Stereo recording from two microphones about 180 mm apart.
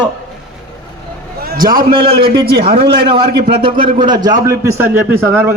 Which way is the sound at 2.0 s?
30° right (ahead or behind).